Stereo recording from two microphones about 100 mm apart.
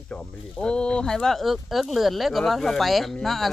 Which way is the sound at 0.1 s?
10° left (ahead or behind).